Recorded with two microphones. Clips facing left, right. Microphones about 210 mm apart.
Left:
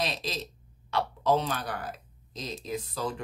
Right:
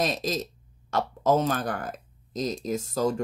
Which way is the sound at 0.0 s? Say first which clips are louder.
Right 6 dB; 45° right (ahead or behind).